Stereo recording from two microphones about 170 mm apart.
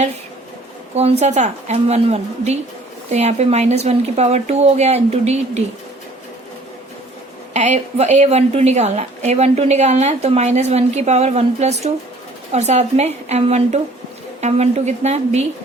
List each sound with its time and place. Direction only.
1.2 s a woman's voice: 40° right (ahead or behind)
7.5 s a woman's voice: 40° right (ahead or behind)